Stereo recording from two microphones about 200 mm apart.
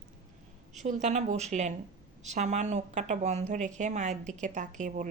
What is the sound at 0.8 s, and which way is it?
A woman's voice, 35° right (ahead or behind).